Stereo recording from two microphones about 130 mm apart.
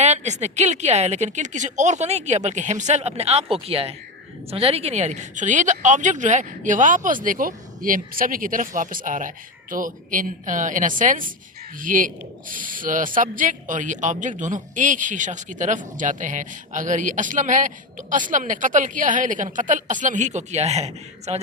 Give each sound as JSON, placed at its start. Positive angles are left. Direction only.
{"t": 0.0, "sound": "a woman's voice", "side_deg": -60}